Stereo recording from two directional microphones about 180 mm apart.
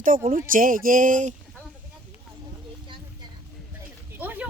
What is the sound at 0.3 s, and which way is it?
Speech, 50° right (ahead or behind).